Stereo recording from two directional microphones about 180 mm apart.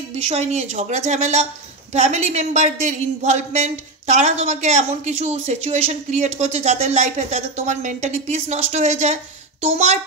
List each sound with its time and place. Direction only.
0.3 s a woman's voice: 40° right (ahead or behind)